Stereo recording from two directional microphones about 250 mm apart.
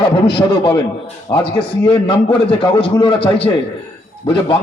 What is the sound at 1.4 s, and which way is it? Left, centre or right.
A man's voice, left.